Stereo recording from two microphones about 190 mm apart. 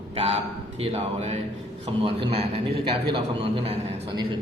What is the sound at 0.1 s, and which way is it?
A man's voice, 30° right (ahead or behind).